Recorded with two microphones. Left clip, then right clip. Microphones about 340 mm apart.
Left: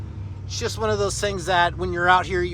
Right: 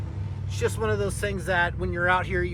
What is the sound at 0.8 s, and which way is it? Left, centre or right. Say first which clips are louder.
Speech: left 9 dB; centre.